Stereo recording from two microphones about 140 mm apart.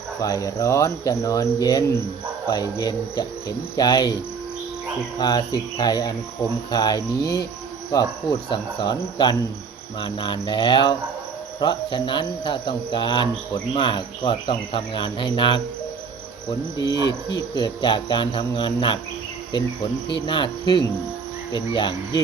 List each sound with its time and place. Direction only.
0.2 s speech: 25° left (ahead or behind)
20.2 s speech: 35° left (ahead or behind)